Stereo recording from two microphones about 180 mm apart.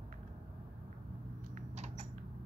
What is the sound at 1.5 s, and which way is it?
Rodents, 40° right (ahead or behind).